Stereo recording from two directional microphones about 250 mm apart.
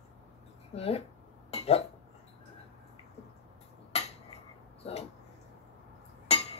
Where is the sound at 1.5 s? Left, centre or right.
Left.